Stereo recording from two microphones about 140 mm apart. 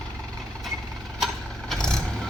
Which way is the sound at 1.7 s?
5° left (ahead or behind).